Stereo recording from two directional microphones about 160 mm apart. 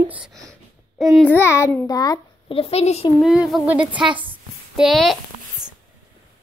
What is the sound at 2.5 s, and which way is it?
Speech, 40° left (ahead or behind).